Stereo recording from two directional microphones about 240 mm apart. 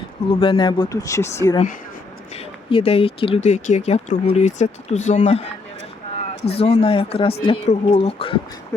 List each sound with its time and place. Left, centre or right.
0.3 s speech: centre
2.3 s speech: left
6.4 s speech: left